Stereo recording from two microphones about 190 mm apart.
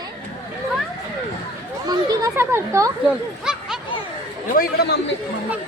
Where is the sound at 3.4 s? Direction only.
5° right (ahead or behind).